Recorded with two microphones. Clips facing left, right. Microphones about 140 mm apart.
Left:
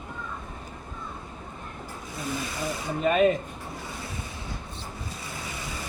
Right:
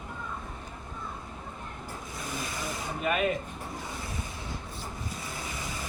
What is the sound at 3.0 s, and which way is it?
Speech, 30° left (ahead or behind).